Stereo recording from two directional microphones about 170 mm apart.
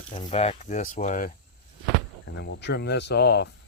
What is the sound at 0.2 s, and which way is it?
Speech, 35° left (ahead or behind).